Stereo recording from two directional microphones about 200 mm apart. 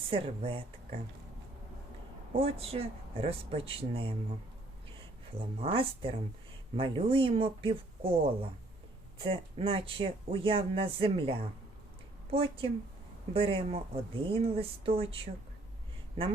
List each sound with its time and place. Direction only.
0.1 s speech: 30° right (ahead or behind)
2.3 s speech: 30° right (ahead or behind)
5.5 s speech: 30° right (ahead or behind)